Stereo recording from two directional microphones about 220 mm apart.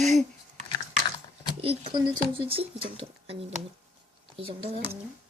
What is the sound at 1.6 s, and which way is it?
Speech, 25° right (ahead or behind).